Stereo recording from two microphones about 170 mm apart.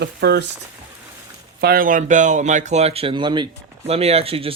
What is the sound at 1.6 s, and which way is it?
Speech, 55° right (ahead or behind).